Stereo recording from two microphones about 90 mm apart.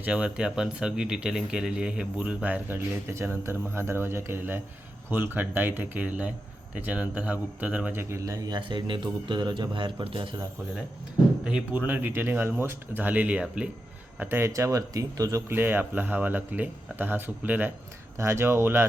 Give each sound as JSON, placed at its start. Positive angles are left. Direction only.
{"t": 0.0, "sound": "speech", "side_deg": -10}
{"t": 8.2, "sound": "speech", "side_deg": -40}
{"t": 11.4, "sound": "speech", "side_deg": -15}
{"t": 14.2, "sound": "speech", "side_deg": -25}
{"t": 15.5, "sound": "speech", "side_deg": -25}